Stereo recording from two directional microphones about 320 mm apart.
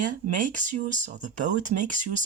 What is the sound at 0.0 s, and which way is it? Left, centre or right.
Speech, right.